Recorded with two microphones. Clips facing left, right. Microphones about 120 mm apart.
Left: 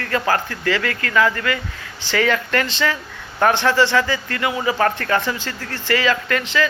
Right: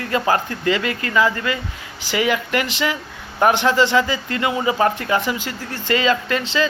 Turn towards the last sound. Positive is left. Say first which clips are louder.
# right 1 dB
turn(degrees=-20)  # may be behind; listen again after turning